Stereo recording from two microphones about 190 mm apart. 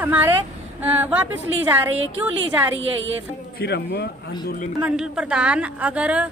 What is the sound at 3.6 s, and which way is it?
Speech, 55° left (ahead or behind).